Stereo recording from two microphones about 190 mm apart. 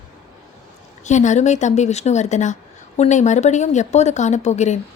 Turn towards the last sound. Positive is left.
turn(degrees=35)  # may be behind; listen again after turning